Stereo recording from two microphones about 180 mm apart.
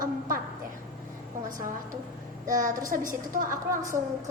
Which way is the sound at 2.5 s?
45° right (ahead or behind).